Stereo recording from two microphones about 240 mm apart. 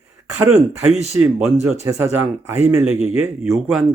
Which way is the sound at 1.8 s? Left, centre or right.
Centre.